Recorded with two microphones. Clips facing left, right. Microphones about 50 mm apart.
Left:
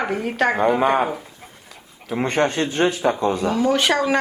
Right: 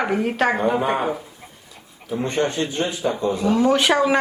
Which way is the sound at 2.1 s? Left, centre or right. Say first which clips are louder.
Left 2 dB; left.